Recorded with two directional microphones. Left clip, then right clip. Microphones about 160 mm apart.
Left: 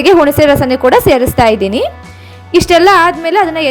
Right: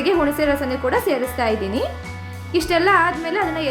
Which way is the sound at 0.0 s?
55° left (ahead or behind).